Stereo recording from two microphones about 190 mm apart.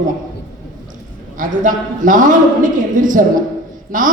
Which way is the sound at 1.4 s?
45° right (ahead or behind).